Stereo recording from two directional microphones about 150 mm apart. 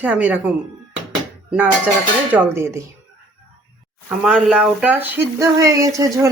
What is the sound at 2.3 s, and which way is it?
Speech, 15° right (ahead or behind).